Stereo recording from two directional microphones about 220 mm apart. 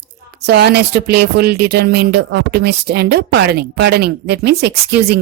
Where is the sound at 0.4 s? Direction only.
45° right (ahead or behind).